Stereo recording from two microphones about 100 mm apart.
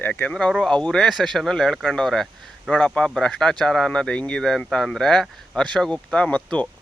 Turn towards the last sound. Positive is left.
turn(degrees=15)  # may be behind; listen again after turning